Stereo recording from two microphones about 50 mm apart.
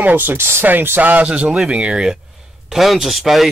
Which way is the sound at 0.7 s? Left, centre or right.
Right.